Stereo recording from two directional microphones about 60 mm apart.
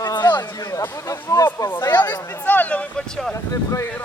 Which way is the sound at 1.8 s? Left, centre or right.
Left.